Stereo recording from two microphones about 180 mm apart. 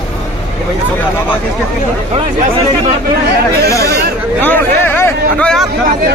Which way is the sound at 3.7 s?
15° left (ahead or behind).